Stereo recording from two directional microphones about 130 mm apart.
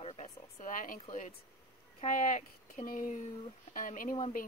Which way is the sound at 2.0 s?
85° left.